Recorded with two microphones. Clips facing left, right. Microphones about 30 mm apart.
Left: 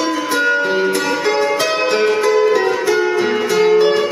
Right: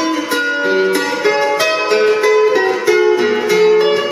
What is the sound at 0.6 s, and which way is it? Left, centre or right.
Music, centre.